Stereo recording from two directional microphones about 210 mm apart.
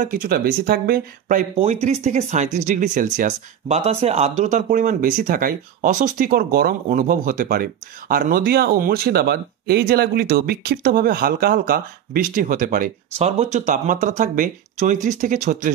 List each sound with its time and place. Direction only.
0.0 s speech: 40° right (ahead or behind)
1.6 s speech: 30° right (ahead or behind)